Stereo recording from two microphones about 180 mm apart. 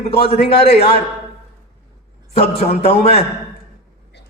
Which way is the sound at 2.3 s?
35° left (ahead or behind).